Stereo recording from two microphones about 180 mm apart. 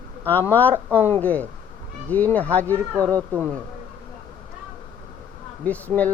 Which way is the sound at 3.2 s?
10° right (ahead or behind).